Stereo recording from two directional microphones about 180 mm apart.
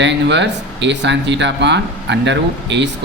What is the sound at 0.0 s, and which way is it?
Speech, 75° right (ahead or behind).